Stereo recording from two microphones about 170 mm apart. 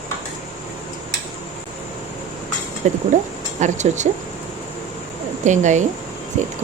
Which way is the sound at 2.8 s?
45° right (ahead or behind).